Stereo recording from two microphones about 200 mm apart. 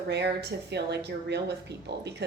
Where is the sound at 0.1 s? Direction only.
55° right (ahead or behind).